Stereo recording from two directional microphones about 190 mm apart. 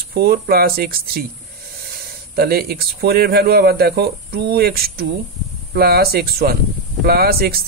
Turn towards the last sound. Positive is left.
turn(degrees=-55)  # may be behind; listen again after turning